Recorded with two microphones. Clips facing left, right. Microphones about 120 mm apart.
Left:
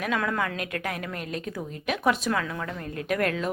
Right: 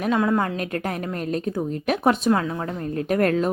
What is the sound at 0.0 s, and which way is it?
Speech, 25° right (ahead or behind).